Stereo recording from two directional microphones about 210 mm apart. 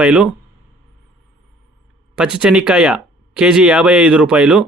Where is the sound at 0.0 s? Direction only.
5° right (ahead or behind).